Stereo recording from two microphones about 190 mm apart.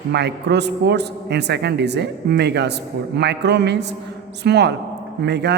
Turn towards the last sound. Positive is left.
turn(degrees=-60)  # may be behind; listen again after turning